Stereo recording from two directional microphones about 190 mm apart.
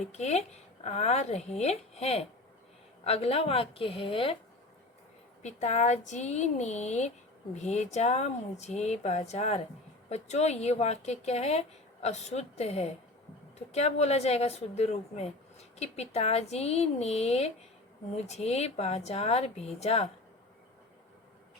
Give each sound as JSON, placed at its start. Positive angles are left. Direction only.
{"t": 0.0, "sound": "a woman's voice", "side_deg": 35}
{"t": 5.4, "sound": "speech", "side_deg": 40}